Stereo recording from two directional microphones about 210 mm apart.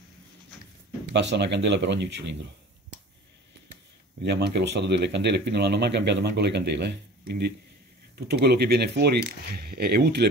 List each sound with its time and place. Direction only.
1.0 s speech: 55° right (ahead or behind)
4.2 s speech: 55° right (ahead or behind)